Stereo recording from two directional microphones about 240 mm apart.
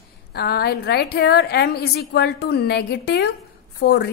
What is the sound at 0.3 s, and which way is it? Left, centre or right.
A woman's voice, left.